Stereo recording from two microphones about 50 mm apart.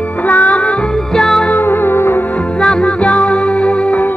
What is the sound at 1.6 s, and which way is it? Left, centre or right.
Music, left.